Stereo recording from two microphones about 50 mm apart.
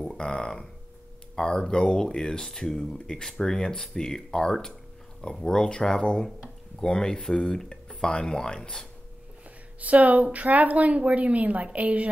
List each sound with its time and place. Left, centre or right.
0.1 s speech: centre
9.8 s speech: right